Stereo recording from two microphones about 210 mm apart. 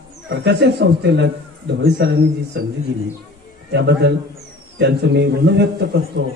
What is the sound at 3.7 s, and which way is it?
Speech, 55° right (ahead or behind).